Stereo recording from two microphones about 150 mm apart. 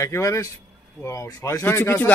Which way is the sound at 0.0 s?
20° left (ahead or behind).